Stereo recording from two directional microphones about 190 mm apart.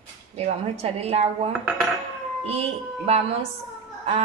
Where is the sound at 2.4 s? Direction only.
30° right (ahead or behind).